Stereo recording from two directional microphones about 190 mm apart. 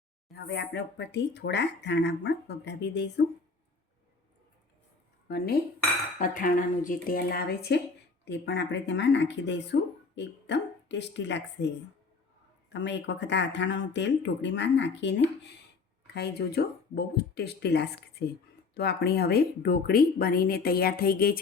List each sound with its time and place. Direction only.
0.3 s speech: 60° left (ahead or behind)
5.3 s speech: 55° left (ahead or behind)
6.1 s speech: 45° left (ahead or behind); by 11.7 s 65° left (ahead or behind)
12.7 s speech: 65° left (ahead or behind); by 21.3 s 50° left (ahead or behind)